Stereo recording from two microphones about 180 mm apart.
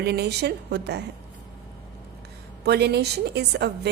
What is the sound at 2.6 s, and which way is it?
A woman's voice, 65° right (ahead or behind).